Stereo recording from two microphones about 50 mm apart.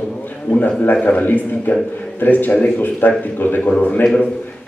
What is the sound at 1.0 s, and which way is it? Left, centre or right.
A man's voice, left.